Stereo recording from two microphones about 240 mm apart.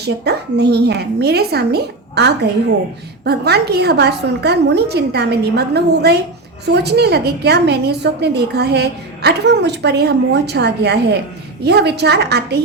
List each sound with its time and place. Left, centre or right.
0.0 s a woman's voice: right